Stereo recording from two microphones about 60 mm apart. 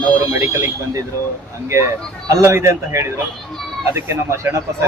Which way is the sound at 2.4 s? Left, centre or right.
Right.